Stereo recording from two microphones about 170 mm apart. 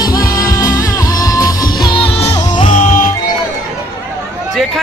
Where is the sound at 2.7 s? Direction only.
45° left (ahead or behind).